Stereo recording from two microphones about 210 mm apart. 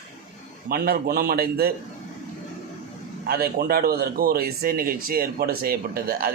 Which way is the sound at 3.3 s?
45° right (ahead or behind).